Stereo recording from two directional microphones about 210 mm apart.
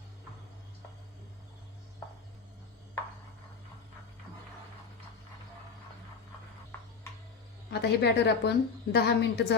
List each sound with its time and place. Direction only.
7.7 s a woman's voice: 50° left (ahead or behind)